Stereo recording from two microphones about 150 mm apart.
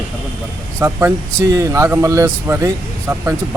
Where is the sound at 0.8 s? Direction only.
15° right (ahead or behind).